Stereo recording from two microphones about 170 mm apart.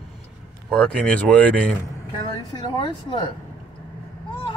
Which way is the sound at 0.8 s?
5° left (ahead or behind).